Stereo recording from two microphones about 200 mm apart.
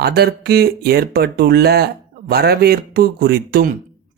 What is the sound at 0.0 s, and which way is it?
Speech, 50° right (ahead or behind).